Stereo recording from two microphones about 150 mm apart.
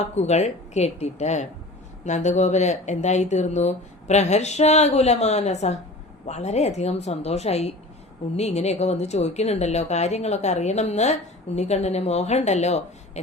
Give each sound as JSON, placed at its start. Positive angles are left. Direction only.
{"t": 0.2, "sound": "speech", "side_deg": 50}